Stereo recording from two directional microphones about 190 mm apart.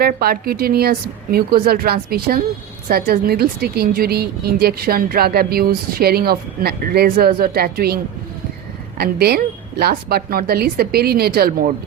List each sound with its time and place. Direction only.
0.0 s a woman's voice: 55° right (ahead or behind)
9.0 s a woman's voice: 55° right (ahead or behind)